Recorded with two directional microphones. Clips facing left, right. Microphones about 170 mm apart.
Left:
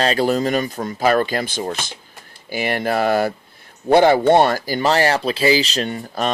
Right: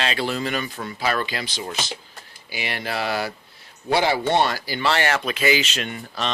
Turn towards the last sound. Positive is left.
turn(degrees=40)  # may be behind; listen again after turning